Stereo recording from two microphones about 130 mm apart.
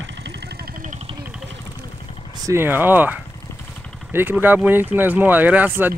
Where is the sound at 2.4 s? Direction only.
15° right (ahead or behind).